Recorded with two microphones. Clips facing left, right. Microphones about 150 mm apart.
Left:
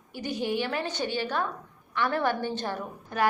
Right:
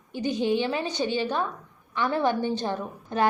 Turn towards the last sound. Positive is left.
turn(degrees=-20)  # may be behind; listen again after turning